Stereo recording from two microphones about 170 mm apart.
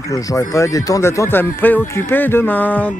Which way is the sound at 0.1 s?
20° left (ahead or behind).